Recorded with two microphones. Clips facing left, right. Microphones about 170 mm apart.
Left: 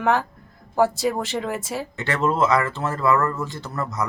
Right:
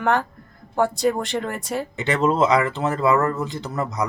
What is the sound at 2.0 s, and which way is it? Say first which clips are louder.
Speech: right 2 dB; 20° right (ahead or behind).